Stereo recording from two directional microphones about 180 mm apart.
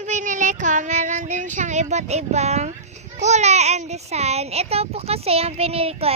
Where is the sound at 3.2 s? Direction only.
40° right (ahead or behind).